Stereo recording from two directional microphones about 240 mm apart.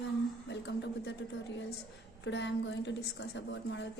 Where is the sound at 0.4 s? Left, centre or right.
Left.